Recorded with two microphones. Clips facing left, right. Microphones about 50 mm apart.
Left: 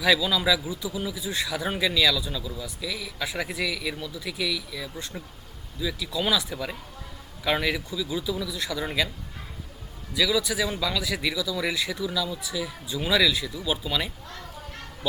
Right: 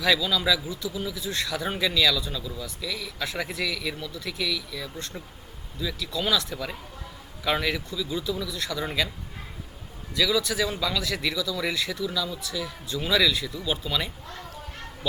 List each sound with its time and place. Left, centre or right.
0.0 s a man's voice: centre
10.1 s a man's voice: centre